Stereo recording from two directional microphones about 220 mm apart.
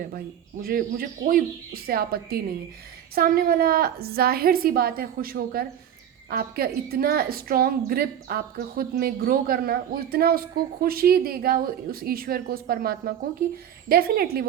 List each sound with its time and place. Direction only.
0.6 s a woman's voice: 45° right (ahead or behind)